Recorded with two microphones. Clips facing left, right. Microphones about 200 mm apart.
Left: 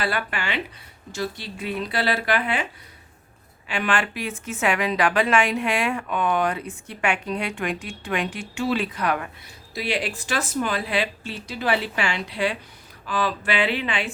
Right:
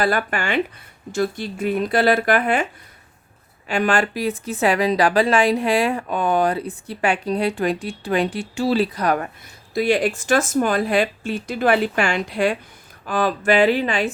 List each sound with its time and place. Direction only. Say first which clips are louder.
0.0 s speech: right 6 dB; 45° right (ahead or behind)
3.7 s a woman's voice: right 5 dB; 40° right (ahead or behind)